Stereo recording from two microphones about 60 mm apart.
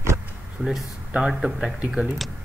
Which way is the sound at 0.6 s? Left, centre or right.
Centre.